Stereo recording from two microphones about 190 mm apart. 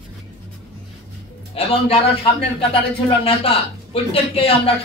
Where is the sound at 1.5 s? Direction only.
30° left (ahead or behind).